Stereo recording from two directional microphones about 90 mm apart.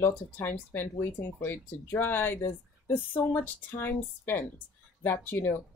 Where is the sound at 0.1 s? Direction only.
25° left (ahead or behind).